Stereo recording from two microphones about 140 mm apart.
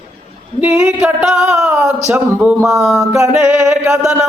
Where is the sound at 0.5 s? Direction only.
10° right (ahead or behind).